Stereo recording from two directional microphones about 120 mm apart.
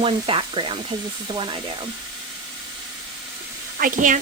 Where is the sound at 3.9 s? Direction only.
90° right.